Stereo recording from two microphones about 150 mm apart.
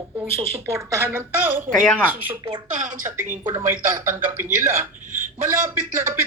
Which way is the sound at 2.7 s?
55° right (ahead or behind).